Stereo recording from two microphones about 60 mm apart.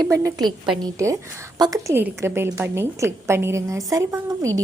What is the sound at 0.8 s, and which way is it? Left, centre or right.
Speech, right.